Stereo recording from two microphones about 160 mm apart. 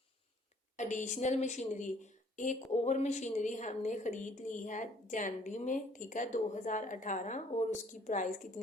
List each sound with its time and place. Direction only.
0.8 s a woman's voice: 50° left (ahead or behind)